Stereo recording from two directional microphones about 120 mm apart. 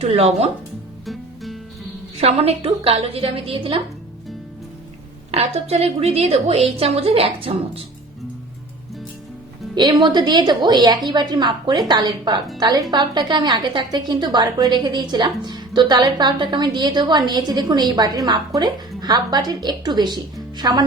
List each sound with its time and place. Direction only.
0.0 s a woman's voice: 60° right (ahead or behind)
1.0 s music: centre (ahead or behind)
2.2 s a woman's voice: 55° right (ahead or behind)
5.3 s a woman's voice: 60° right (ahead or behind)
9.7 s a woman's voice: 40° right (ahead or behind)